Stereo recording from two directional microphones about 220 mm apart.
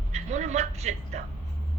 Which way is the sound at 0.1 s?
30° right (ahead or behind).